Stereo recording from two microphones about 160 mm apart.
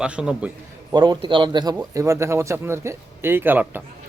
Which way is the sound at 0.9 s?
25° right (ahead or behind).